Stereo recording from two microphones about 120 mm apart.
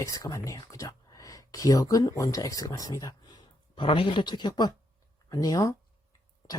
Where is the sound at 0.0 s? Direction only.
30° left (ahead or behind).